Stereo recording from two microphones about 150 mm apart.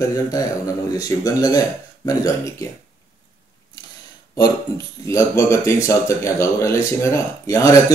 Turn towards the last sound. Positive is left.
turn(degrees=20)  # may be behind; listen again after turning